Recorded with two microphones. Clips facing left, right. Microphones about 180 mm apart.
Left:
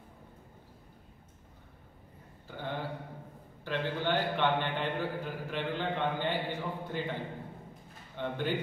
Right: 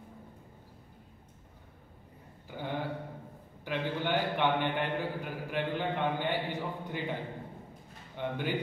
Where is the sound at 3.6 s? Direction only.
15° right (ahead or behind).